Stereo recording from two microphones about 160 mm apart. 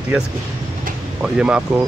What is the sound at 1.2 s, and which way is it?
Speech, 5° right (ahead or behind).